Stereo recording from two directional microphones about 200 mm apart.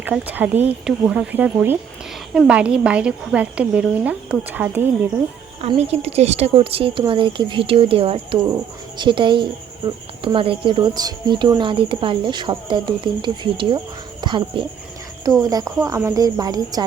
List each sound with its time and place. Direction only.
0.0 s a woman's voice: 10° right (ahead or behind)
5.6 s a woman's voice: 30° right (ahead or behind)